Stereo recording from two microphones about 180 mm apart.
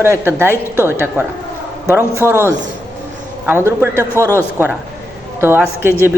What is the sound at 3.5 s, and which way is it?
A man's voice, 15° right (ahead or behind).